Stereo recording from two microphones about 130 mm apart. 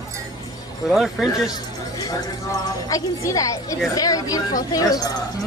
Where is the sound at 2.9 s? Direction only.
25° left (ahead or behind).